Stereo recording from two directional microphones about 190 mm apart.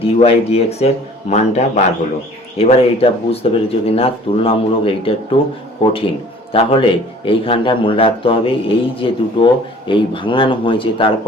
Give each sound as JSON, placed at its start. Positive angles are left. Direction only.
{"t": 0.0, "sound": "speech", "side_deg": 30}